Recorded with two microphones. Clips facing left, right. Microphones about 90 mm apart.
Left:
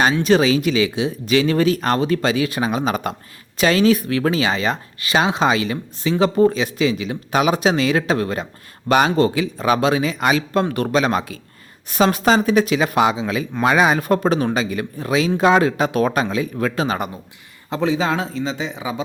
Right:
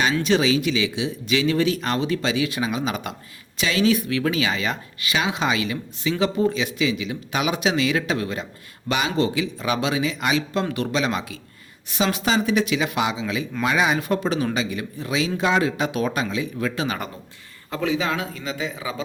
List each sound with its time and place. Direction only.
0.1 s a man's voice: 40° left (ahead or behind); by 19.0 s 20° left (ahead or behind)